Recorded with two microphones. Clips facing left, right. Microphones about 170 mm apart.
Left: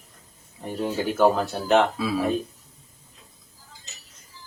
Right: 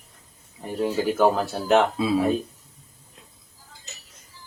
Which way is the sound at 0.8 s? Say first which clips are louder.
Even; 5° right (ahead or behind).